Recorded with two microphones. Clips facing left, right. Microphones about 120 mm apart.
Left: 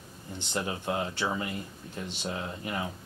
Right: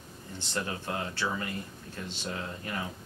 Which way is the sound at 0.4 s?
20° left (ahead or behind).